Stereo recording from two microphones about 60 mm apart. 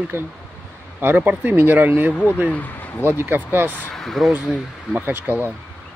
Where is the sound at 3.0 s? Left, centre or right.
Right.